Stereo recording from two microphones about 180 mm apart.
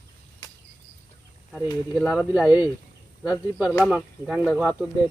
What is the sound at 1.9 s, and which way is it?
Speech, centre (ahead or behind).